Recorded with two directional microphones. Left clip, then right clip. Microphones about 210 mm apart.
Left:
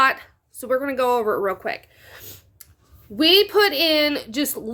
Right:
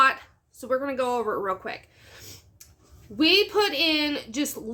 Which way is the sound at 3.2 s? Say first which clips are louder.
Left 5 dB; 35° left (ahead or behind).